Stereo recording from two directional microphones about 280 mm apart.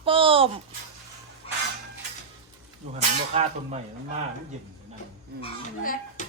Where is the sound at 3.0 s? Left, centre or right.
Right.